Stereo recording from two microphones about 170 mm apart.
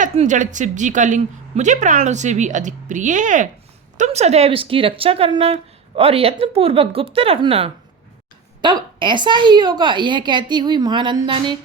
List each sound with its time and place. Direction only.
0.0 s a woman's voice: 45° right (ahead or behind); by 11.5 s 30° right (ahead or behind)